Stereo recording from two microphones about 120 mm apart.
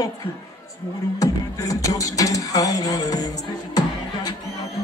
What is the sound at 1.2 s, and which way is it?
Music, 30° left (ahead or behind).